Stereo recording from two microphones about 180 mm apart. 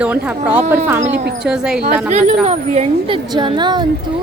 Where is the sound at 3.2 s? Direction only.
25° right (ahead or behind).